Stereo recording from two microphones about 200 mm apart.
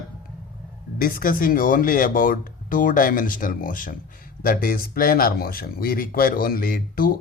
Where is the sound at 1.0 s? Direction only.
45° left (ahead or behind).